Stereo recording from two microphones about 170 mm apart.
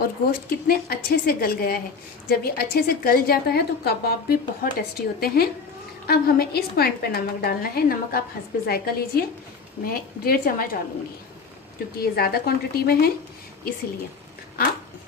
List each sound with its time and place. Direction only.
0.0 s a woman's voice: 60° left (ahead or behind)
11.9 s a woman's voice: 65° left (ahead or behind)